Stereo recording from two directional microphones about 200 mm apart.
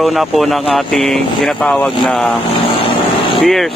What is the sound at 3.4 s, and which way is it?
Speech, centre (ahead or behind).